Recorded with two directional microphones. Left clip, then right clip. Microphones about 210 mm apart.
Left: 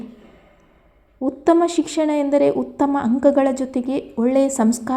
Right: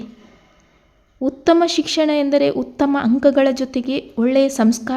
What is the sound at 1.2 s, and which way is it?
A woman's voice, 20° right (ahead or behind).